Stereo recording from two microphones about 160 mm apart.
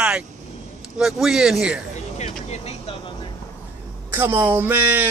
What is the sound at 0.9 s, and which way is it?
Speech, 5° right (ahead or behind).